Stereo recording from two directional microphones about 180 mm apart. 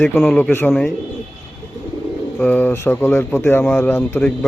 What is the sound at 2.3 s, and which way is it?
Speech, 10° left (ahead or behind).